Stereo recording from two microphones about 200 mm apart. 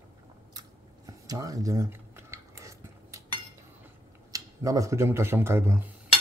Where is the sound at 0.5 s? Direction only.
20° right (ahead or behind).